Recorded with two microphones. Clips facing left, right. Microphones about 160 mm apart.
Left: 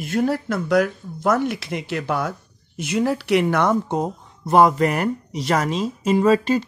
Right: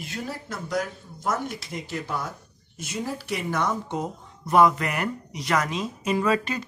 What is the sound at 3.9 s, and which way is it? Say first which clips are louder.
Speech: left 6 dB; 35° left (ahead or behind).